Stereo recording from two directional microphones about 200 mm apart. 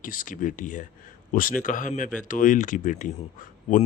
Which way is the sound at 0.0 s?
40° left (ahead or behind).